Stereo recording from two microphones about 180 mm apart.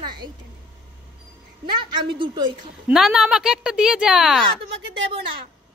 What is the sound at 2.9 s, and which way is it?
Speech, 5° right (ahead or behind).